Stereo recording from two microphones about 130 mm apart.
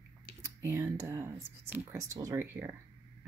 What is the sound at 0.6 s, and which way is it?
Speech, 25° right (ahead or behind).